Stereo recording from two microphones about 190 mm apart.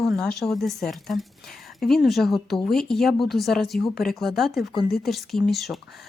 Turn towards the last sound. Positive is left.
turn(degrees=0)  # may be behind; listen again after turning